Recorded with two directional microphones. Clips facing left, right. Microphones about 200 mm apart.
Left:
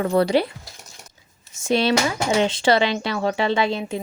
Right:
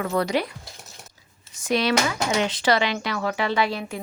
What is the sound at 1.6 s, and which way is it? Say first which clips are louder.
Speech: left 3 dB; 25° left (ahead or behind).